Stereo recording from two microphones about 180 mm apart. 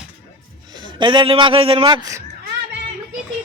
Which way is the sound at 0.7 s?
25° right (ahead or behind).